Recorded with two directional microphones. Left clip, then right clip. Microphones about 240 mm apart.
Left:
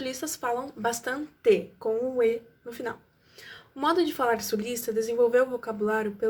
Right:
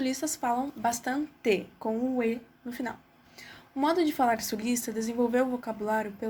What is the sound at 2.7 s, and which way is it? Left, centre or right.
A woman's voice, right.